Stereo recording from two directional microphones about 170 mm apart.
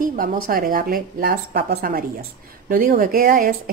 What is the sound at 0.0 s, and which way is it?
Speech, 55° right (ahead or behind).